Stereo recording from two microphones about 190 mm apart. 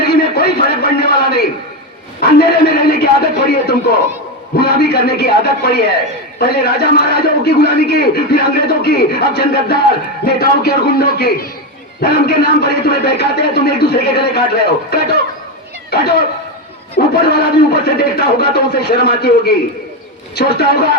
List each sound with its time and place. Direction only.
0.0 s a sound: 60° left (ahead or behind)
4.5 s a man's voice: 60° left (ahead or behind)
17.2 s a man's voice: 55° left (ahead or behind)